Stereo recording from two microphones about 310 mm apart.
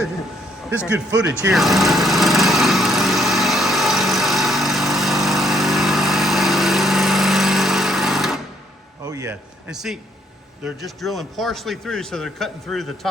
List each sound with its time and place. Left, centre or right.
0.9 s speech: right
1.3 s power tool: centre
9.0 s a sound: centre
10.6 s a man's voice: centre